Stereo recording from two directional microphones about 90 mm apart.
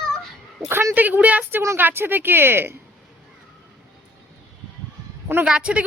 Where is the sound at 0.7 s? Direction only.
25° right (ahead or behind).